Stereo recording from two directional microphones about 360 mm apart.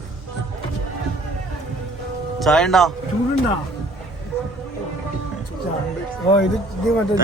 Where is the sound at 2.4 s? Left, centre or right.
Centre.